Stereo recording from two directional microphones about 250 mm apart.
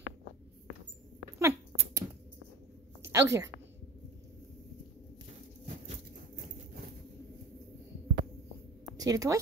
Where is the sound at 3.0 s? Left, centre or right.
Centre.